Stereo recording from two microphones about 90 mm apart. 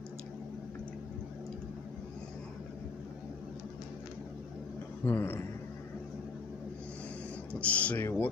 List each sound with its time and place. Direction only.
5.0 s speech: 25° left (ahead or behind)
7.6 s speech: 15° left (ahead or behind)